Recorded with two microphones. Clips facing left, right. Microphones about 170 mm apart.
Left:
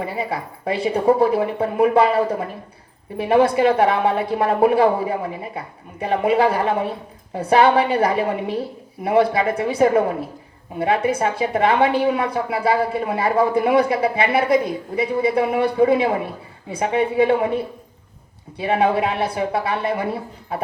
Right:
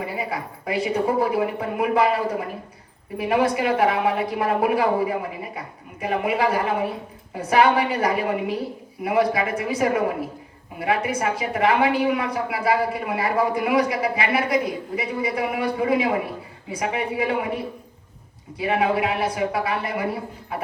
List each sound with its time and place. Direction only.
0.0 s a woman's voice: 30° left (ahead or behind)